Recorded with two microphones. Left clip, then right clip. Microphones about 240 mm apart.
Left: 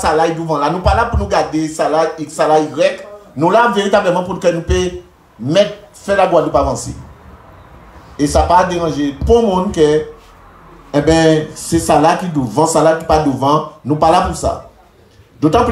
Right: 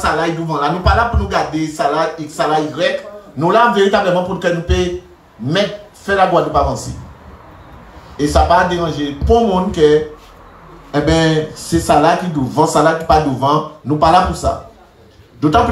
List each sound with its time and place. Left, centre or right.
0.0 s speech: left
8.2 s speech: left